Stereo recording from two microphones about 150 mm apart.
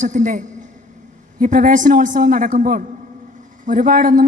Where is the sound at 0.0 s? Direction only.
55° right (ahead or behind).